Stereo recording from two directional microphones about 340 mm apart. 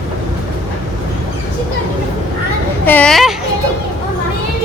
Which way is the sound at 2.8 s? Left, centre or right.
Centre.